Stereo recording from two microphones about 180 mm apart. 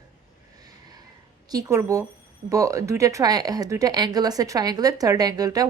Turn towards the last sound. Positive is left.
turn(degrees=-20)  # may be behind; listen again after turning